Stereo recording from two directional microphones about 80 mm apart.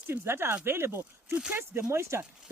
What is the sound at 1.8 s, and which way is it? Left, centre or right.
Speech, right.